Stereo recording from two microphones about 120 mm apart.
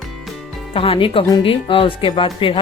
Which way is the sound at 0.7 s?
50° left (ahead or behind).